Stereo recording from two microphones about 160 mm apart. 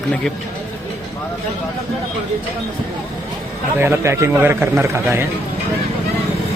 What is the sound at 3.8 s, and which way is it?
Speech, 15° right (ahead or behind).